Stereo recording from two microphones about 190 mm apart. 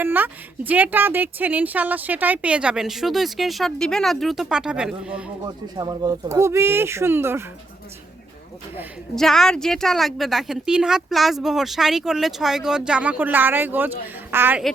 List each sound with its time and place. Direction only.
0.0 s a woman's voice: 10° right (ahead or behind)
5.7 s speech: 20° right (ahead or behind)
9.1 s a woman's voice: centre (ahead or behind)